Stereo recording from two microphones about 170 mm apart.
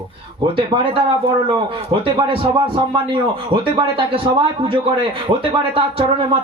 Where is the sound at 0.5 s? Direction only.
30° right (ahead or behind).